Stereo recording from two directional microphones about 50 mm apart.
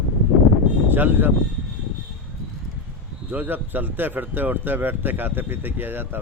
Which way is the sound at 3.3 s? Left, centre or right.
Right.